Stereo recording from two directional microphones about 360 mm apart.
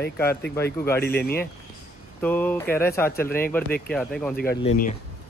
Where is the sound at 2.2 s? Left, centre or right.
Centre.